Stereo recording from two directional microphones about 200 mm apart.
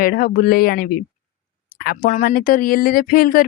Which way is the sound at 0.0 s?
45° left (ahead or behind).